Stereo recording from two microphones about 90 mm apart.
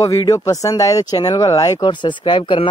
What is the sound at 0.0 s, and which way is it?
Speech, 40° left (ahead or behind).